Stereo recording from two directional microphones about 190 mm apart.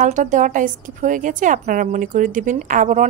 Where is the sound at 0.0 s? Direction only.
40° right (ahead or behind).